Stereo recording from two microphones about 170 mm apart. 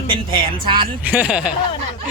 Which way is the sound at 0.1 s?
30° right (ahead or behind).